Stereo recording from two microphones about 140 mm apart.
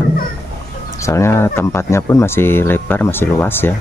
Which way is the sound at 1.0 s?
20° left (ahead or behind).